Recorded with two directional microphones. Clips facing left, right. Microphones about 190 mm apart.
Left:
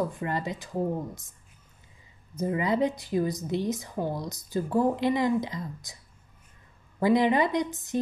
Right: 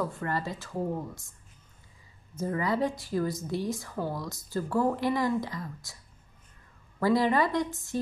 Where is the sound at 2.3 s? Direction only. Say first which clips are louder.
Left 2 dB; 20° left (ahead or behind).